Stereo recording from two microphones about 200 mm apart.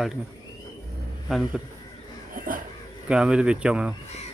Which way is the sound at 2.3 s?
45° right (ahead or behind).